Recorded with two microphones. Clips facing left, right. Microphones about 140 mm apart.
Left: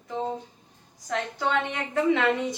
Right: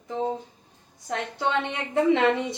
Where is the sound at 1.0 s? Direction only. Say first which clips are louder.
Even; 25° right (ahead or behind).